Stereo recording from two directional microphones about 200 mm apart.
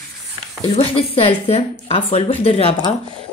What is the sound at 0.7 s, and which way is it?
A woman's voice, 30° left (ahead or behind).